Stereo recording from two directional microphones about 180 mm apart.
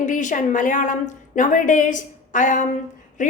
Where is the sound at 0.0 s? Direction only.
45° left (ahead or behind).